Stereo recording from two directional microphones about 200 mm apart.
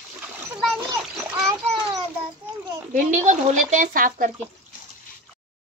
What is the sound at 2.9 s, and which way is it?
Speech, 40° right (ahead or behind).